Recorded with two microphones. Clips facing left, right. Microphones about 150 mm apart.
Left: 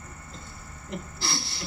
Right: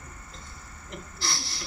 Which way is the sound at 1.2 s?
30° left (ahead or behind).